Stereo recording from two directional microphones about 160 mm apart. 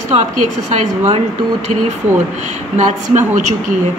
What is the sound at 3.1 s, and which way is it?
Speech, 50° right (ahead or behind).